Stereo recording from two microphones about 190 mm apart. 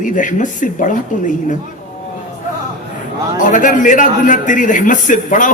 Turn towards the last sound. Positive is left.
turn(degrees=45)  # may be behind; listen again after turning